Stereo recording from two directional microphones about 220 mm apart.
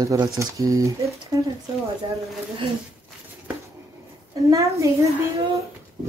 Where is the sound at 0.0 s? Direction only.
15° right (ahead or behind).